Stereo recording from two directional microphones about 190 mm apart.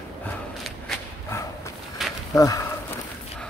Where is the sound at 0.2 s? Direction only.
Centre (ahead or behind).